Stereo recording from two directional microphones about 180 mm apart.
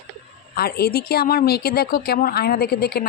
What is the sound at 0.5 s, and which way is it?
A woman's voice, 60° left (ahead or behind).